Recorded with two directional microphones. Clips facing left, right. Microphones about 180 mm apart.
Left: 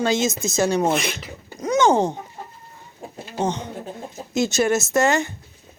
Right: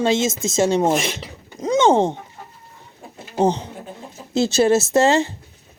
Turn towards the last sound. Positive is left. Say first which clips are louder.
# right 3 dB
turn(degrees=-30)  # may be behind; listen again after turning